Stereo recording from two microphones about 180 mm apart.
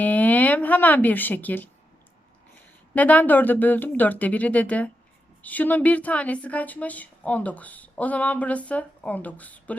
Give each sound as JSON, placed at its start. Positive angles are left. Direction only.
{"t": 0.0, "sound": "speech", "side_deg": 10}
{"t": 2.9, "sound": "a woman's voice", "side_deg": 10}